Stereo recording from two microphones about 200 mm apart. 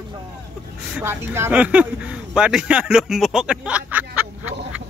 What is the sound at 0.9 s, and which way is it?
A man's voice, 10° right (ahead or behind).